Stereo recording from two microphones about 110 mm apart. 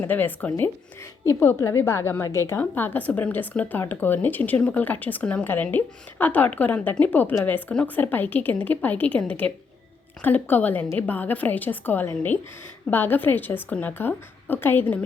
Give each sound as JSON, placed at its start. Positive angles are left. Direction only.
{"t": 0.0, "sound": "a woman's voice", "side_deg": 15}